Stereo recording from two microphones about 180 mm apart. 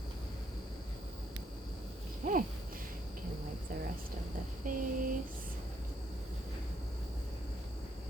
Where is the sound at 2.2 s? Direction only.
50° right (ahead or behind).